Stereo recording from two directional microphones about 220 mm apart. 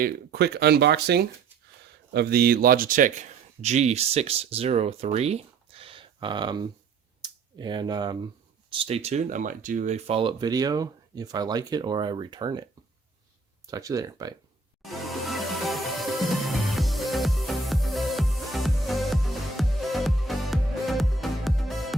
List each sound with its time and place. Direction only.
0.0 s speech: 45° right (ahead or behind); by 12.6 s 20° right (ahead or behind)
13.7 s speech: 15° right (ahead or behind)
14.8 s music: centre (ahead or behind)